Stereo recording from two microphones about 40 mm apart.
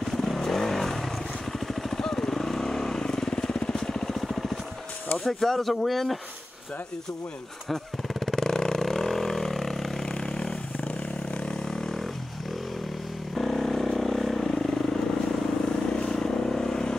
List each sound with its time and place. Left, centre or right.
0.1 s vehicle: centre
3.0 s motorcycle: centre
3.7 s vehicle: centre
5.2 s speech: centre
8.1 s vehicle: centre
10.2 s vehicle: left
13.3 s vehicle: centre
15.9 s vehicle: centre